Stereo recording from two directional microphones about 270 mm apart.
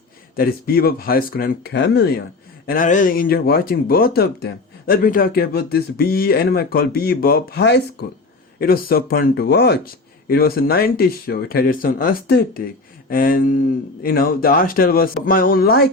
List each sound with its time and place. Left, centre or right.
0.3 s speech: left